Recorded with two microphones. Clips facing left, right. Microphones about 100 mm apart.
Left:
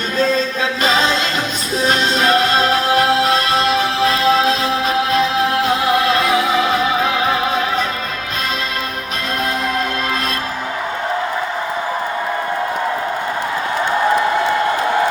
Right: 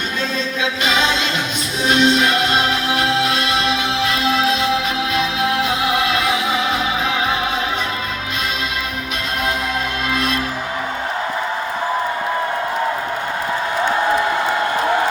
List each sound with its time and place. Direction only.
0.2 s music: 40° left (ahead or behind)